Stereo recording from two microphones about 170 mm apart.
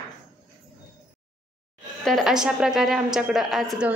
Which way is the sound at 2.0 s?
Centre (ahead or behind).